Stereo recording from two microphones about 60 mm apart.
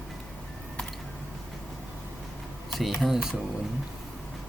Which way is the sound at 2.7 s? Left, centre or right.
Centre.